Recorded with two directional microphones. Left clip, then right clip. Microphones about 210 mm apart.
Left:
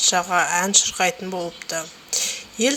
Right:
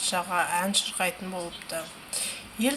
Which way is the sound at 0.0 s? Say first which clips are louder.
Left 8 dB; 30° left (ahead or behind).